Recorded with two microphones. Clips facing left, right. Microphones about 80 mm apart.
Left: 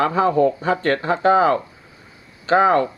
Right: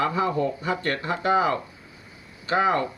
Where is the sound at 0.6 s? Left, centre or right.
Left.